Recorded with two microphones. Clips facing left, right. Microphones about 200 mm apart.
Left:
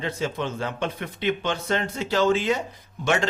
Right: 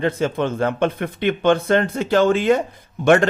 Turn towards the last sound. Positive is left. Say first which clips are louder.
# right 9 dB
turn(degrees=-55)  # may be behind; listen again after turning